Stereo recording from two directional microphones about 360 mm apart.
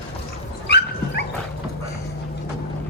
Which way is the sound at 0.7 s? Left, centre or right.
Left.